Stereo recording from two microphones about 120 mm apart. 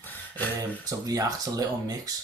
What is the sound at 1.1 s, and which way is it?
Speech, 30° right (ahead or behind).